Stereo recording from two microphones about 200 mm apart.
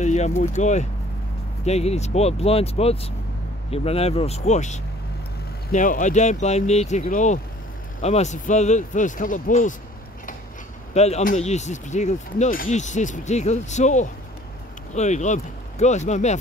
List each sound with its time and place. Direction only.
0.0 s speech: 35° left (ahead or behind)
11.0 s speech: 35° left (ahead or behind)